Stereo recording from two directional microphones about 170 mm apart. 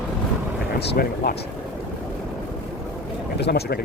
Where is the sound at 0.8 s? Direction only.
65° left (ahead or behind).